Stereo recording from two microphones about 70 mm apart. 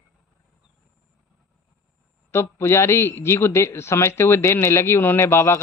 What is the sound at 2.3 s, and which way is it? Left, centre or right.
A man's voice, left.